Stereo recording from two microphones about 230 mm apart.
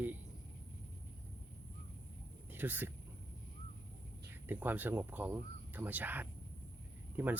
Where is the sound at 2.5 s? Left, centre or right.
Centre.